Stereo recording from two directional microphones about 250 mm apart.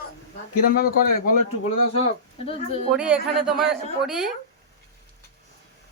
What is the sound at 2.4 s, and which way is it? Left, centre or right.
Speech, left.